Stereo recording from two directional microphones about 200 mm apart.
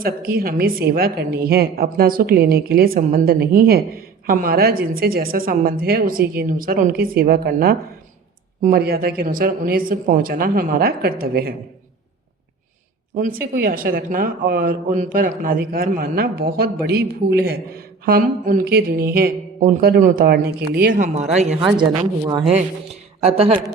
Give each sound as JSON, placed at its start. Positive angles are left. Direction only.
{"t": 0.0, "sound": "speech", "side_deg": -50}
{"t": 13.1, "sound": "speech", "side_deg": -45}
{"t": 21.8, "sound": "speech", "side_deg": -20}
{"t": 22.5, "sound": "a man's voice", "side_deg": -30}